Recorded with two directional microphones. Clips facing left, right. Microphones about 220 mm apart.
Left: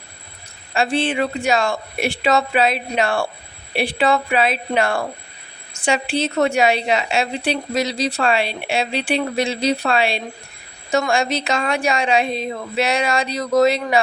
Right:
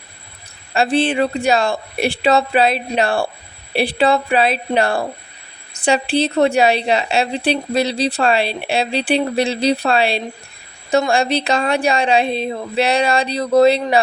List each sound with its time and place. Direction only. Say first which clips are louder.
0.7 s a woman's voice: right 3 dB; 35° right (ahead or behind)